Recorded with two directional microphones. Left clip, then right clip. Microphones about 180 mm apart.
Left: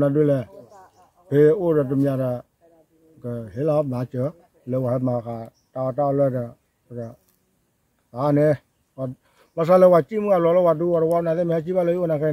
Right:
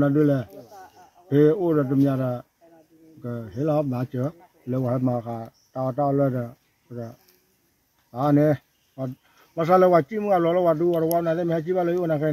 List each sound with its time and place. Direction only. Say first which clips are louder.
0.0 s speech: left 2 dB; 20° left (ahead or behind); by 6.5 s 5° left (ahead or behind)
8.3 s a sound: left 2 dB; 25° left (ahead or behind)
9.6 s speech: left 3 dB; 30° left (ahead or behind)